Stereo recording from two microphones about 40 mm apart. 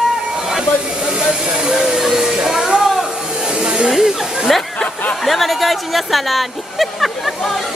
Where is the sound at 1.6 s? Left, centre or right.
Centre.